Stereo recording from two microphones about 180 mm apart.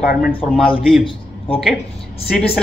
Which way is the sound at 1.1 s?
30° left (ahead or behind).